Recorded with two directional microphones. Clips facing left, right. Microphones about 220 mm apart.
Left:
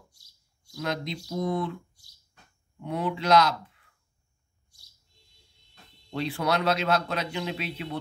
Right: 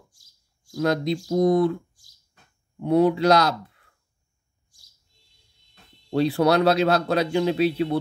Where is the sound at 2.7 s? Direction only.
40° right (ahead or behind).